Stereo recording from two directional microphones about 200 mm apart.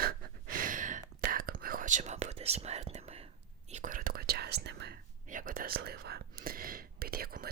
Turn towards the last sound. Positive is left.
turn(degrees=-50)  # may be behind; listen again after turning